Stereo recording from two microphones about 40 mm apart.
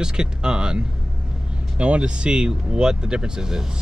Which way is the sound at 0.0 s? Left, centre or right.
Centre.